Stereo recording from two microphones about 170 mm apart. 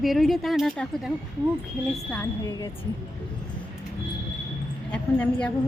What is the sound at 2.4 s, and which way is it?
Speech, 25° left (ahead or behind).